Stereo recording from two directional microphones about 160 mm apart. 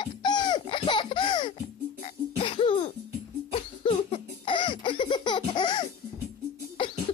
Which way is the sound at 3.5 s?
35° left (ahead or behind).